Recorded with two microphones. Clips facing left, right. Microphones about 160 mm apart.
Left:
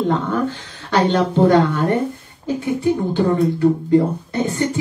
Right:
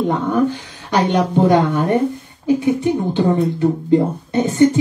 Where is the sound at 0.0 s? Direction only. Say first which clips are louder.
Right 2 dB; 15° right (ahead or behind).